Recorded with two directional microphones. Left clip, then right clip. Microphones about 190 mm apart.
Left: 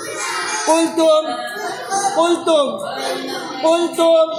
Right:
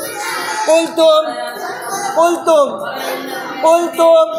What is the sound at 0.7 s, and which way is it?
Speech, 35° left (ahead or behind).